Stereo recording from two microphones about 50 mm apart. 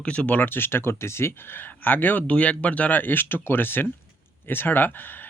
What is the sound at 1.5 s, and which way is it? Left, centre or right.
Speech, left.